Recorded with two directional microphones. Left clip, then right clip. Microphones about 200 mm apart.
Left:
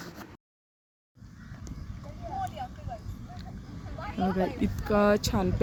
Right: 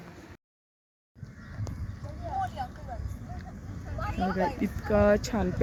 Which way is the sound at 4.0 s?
10° left (ahead or behind).